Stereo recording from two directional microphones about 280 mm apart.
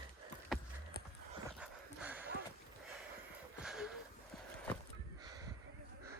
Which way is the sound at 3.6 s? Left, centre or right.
Centre.